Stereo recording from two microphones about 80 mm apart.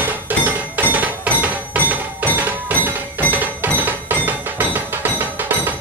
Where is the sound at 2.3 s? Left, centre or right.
Right.